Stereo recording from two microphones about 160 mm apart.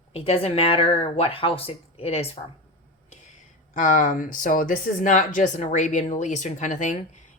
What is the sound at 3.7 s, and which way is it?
Speech, 55° left (ahead or behind).